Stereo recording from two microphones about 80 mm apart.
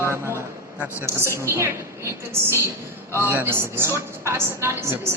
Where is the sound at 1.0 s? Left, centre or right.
Right.